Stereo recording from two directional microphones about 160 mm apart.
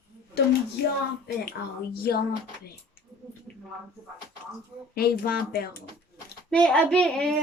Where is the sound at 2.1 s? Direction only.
75° left (ahead or behind).